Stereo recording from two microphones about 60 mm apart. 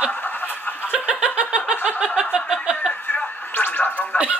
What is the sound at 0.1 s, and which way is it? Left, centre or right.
Snicker, left.